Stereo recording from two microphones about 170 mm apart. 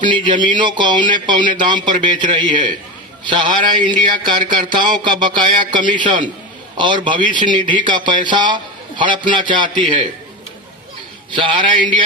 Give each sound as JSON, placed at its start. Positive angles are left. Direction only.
{"t": 0.0, "sound": "speech", "side_deg": -30}
{"t": 11.3, "sound": "speech", "side_deg": -30}